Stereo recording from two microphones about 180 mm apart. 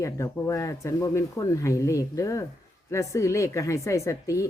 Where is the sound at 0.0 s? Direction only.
15° left (ahead or behind).